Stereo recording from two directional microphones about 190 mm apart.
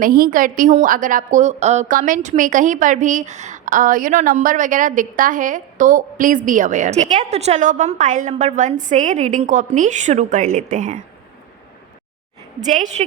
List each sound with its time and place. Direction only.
0.0 s a woman's voice: 50° right (ahead or behind)
12.5 s a woman's voice: 40° right (ahead or behind)